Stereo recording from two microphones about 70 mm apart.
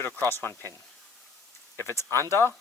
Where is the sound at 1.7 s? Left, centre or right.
Left.